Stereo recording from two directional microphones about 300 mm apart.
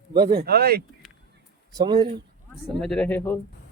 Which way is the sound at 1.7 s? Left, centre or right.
Centre.